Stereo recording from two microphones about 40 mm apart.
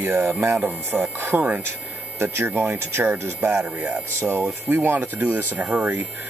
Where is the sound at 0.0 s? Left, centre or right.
Right.